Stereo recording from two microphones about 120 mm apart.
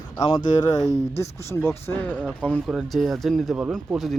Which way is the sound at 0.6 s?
30° left (ahead or behind).